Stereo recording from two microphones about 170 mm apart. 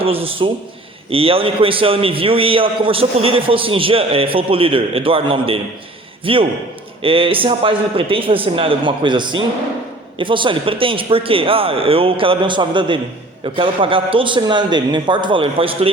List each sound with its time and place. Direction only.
0.0 s a man's voice: 35° right (ahead or behind)